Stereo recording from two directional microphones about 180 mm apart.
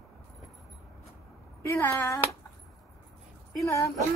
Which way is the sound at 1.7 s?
15° left (ahead or behind).